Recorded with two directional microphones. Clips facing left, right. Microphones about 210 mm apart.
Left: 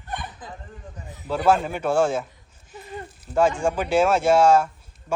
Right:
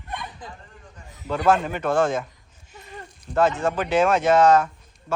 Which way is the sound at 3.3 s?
10° left (ahead or behind).